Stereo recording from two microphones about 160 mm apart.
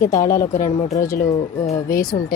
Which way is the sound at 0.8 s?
45° left (ahead or behind).